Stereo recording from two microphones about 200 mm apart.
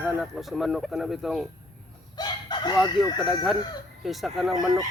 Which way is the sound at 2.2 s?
20° left (ahead or behind).